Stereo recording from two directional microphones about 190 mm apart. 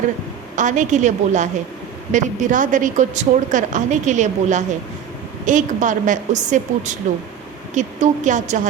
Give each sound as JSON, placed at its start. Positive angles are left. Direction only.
{"t": 0.5, "sound": "a woman's voice", "side_deg": -40}